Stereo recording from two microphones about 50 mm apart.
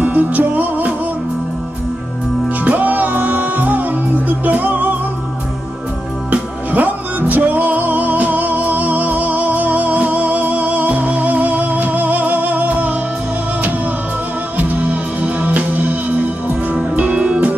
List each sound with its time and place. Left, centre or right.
0.0 s music: right
2.6 s music: right
6.3 s music: right
14.6 s music: right